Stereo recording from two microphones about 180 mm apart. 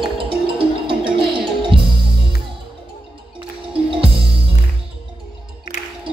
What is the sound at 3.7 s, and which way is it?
Music, 30° right (ahead or behind).